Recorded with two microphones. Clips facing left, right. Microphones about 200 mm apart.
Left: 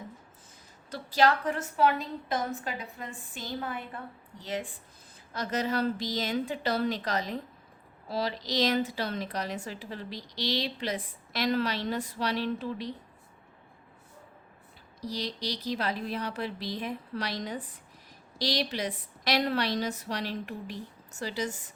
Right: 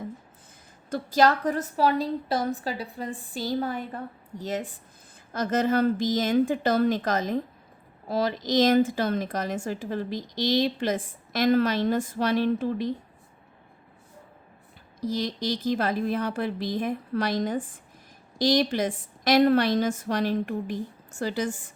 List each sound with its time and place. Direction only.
0.9 s a woman's voice: 45° right (ahead or behind)
15.0 s a woman's voice: 50° right (ahead or behind)